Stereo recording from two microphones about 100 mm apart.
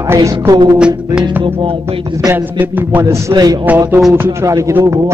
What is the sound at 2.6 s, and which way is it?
Speech, 15° right (ahead or behind).